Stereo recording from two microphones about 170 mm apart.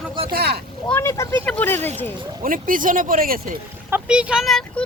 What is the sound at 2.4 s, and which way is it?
Speech, 55° right (ahead or behind).